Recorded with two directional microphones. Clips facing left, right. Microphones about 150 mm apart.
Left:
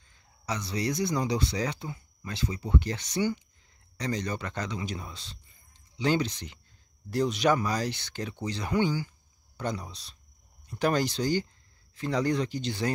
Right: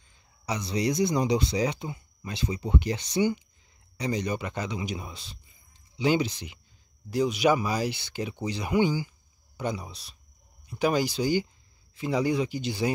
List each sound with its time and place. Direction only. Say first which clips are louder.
0.1 s speech: right 2 dB; 15° right (ahead or behind)